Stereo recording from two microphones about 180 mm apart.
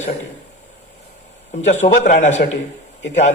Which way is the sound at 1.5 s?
40° left (ahead or behind).